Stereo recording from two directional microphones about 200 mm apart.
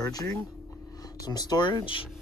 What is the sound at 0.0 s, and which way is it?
Speech, 20° left (ahead or behind).